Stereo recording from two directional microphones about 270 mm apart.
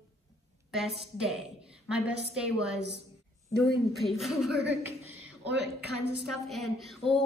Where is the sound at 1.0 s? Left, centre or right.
Centre.